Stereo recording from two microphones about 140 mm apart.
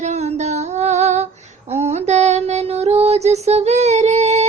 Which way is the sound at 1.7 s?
50° right (ahead or behind).